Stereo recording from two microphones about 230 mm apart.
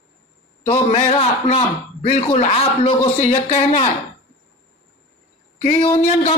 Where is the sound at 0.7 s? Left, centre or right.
Left.